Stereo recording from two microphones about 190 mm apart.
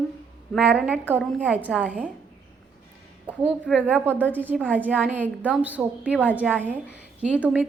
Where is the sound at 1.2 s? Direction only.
5° left (ahead or behind).